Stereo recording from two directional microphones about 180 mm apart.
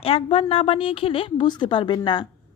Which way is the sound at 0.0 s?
30° left (ahead or behind).